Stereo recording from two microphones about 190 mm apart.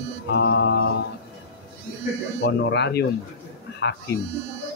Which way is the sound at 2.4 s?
65° left (ahead or behind).